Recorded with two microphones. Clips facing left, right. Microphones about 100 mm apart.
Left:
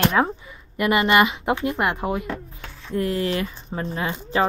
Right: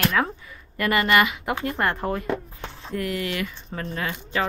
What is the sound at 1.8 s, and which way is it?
Speech, 15° left (ahead or behind).